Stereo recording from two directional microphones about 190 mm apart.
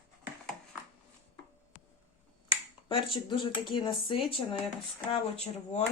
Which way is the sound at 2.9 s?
25° left (ahead or behind).